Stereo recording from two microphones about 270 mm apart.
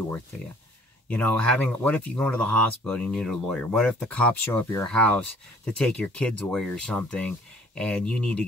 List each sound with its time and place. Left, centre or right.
1.0 s speech: centre